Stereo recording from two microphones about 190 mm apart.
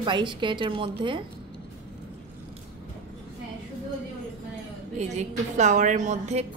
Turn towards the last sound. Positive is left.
turn(degrees=-35)  # may be behind; listen again after turning